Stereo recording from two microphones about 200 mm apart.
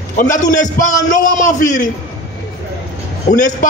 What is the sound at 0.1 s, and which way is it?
A man's voice, 40° left (ahead or behind).